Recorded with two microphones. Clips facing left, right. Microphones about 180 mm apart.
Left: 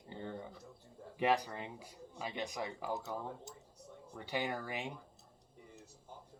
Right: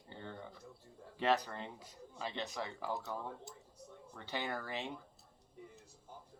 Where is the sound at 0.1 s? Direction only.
15° left (ahead or behind).